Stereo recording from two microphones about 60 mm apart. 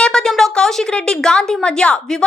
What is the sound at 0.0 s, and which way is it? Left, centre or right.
A woman's voice, centre.